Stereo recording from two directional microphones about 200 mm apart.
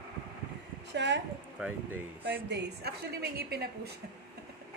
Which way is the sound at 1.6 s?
5° right (ahead or behind).